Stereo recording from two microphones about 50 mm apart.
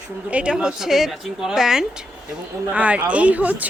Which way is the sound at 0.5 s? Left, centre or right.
Centre.